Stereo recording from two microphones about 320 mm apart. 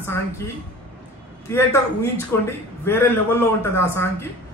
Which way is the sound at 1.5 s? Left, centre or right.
Centre.